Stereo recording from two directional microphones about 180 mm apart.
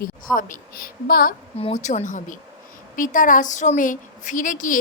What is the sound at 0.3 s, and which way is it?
Speech, 50° left (ahead or behind).